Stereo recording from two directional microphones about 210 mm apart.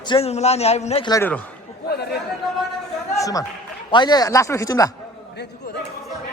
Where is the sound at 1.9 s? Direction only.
50° left (ahead or behind).